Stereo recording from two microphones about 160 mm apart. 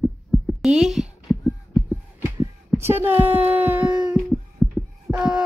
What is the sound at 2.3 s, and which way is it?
Speech, 15° right (ahead or behind).